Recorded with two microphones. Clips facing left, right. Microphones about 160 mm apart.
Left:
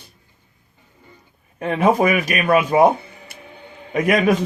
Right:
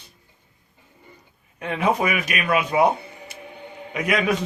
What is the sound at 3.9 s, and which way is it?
Speech, 45° left (ahead or behind).